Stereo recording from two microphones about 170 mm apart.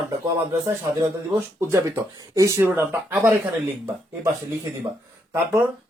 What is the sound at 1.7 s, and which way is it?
Speech, 20° right (ahead or behind).